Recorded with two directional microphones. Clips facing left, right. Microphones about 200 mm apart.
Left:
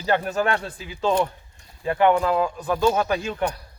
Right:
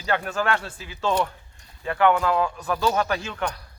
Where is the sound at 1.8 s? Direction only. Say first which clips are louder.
Left 2 dB; 30° left (ahead or behind).